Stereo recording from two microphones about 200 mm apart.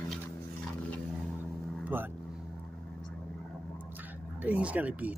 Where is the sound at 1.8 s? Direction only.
10° right (ahead or behind).